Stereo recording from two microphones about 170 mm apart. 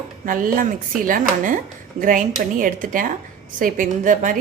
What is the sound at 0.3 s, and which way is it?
A woman's voice, 55° right (ahead or behind).